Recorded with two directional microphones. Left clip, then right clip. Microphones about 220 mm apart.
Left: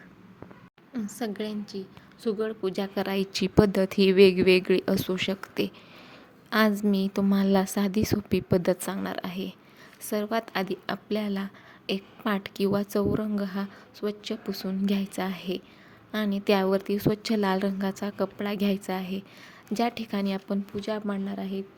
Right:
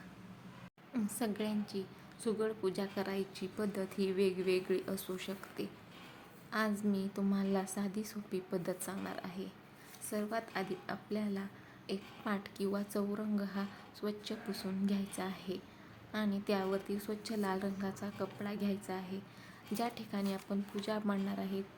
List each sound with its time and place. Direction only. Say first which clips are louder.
1.1 s a woman's voice: left 7 dB; 15° left (ahead or behind); by 20.6 s 35° left (ahead or behind)
20.8 s speech: left 4 dB; 25° left (ahead or behind)